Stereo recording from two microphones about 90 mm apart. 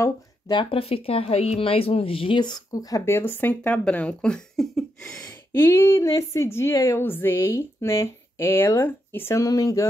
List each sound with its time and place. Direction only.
0.5 s speech: 75° left (ahead or behind)
2.7 s speech: 40° left (ahead or behind)
3.1 s speech: 25° left (ahead or behind); by 5.2 s 5° left (ahead or behind)
5.5 s a woman's voice: 25° left (ahead or behind)
9.4 s speech: 40° left (ahead or behind)